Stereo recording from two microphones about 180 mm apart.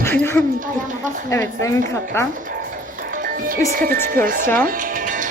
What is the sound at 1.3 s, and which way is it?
Speech, 15° left (ahead or behind).